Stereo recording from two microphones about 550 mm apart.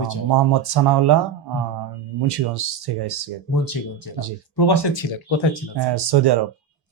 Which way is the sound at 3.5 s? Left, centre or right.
Left.